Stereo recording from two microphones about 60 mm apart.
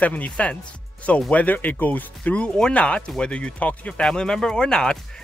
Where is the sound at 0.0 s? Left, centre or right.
Left.